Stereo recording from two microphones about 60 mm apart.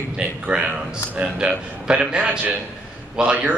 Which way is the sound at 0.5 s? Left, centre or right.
Right.